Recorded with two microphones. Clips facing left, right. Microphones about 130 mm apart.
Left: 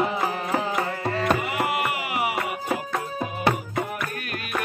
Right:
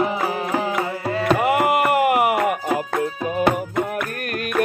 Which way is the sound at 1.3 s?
55° right (ahead or behind).